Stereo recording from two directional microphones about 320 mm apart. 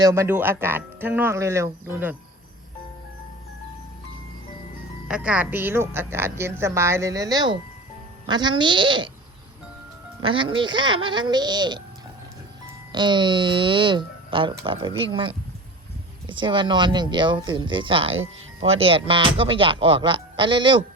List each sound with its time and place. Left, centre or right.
0.0 s a woman's voice: centre
5.0 s a woman's voice: centre
10.2 s a woman's voice: centre
12.9 s a woman's voice: centre